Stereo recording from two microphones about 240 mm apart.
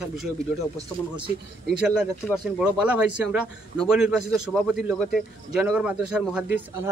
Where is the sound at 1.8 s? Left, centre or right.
Centre.